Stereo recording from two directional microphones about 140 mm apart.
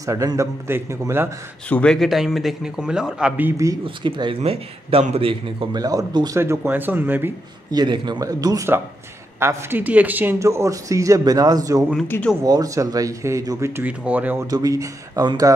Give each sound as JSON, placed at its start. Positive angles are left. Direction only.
{"t": 0.0, "sound": "speech", "side_deg": -25}
{"t": 1.7, "sound": "speech", "side_deg": 5}
{"t": 3.8, "sound": "speech", "side_deg": -35}
{"t": 7.7, "sound": "speech", "side_deg": -35}
{"t": 12.1, "sound": "speech", "side_deg": 15}
{"t": 12.4, "sound": "speech", "side_deg": -25}
{"t": 14.5, "sound": "speech", "side_deg": -25}